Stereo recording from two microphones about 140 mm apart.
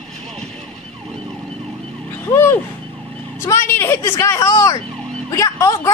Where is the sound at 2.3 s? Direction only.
20° left (ahead or behind).